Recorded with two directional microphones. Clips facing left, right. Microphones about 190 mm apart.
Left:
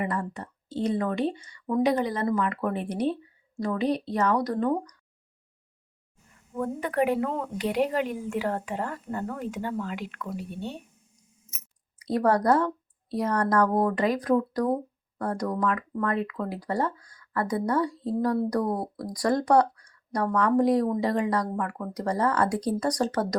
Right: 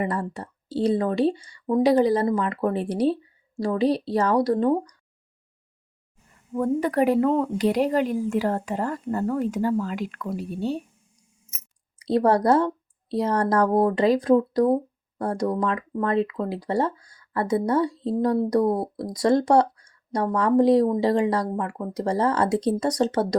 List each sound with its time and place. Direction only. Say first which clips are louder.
0.0 s a woman's voice: right 3 dB; 35° right (ahead or behind)
6.6 s a woman's voice: right 5 dB; 35° right (ahead or behind)
11.9 s speech: right 4 dB; 25° right (ahead or behind)